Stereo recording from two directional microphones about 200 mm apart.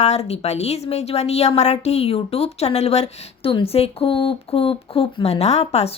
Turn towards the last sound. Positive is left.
turn(degrees=30)  # may be behind; listen again after turning